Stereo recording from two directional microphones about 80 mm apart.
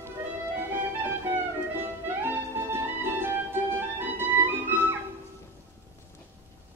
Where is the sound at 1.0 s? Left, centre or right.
Right.